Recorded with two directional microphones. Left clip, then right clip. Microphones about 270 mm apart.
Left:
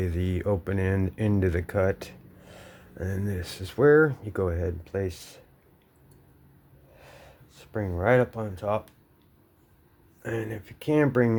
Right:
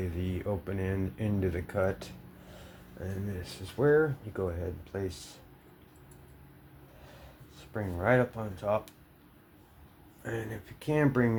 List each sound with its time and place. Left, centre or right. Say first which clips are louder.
0.0 s speech: left 6 dB; left
7.0 s a sound: left 5 dB; left
10.2 s speech: left 5 dB; left